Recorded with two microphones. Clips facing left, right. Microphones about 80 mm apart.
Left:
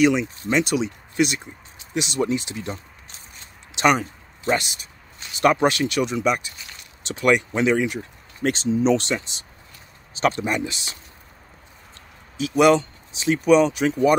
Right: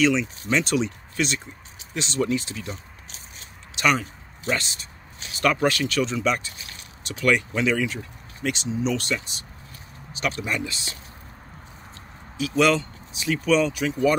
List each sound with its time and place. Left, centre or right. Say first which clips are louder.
0.0 s speech: left 3 dB; centre
5.4 s speech: left 4 dB; left
7.1 s speech: left 3 dB; left
8.4 s speech: left 6 dB; left
12.4 s speech: left 4 dB; left